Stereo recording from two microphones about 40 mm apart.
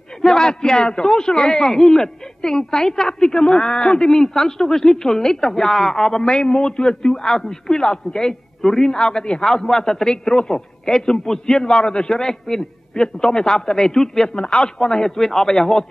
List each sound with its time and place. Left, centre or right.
0.2 s a woman's voice: centre